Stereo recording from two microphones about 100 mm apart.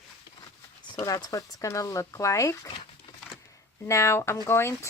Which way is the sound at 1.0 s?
35° left (ahead or behind).